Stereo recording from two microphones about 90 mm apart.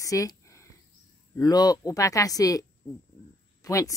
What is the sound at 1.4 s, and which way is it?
A woman's voice, 45° left (ahead or behind).